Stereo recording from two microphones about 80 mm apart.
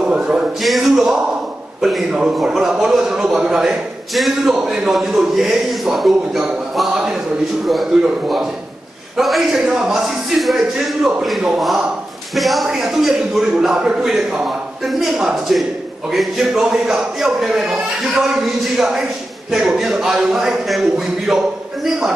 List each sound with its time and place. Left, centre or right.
0.0 s a man's voice: centre
0.6 s a man's voice: centre
9.1 s a man's voice: centre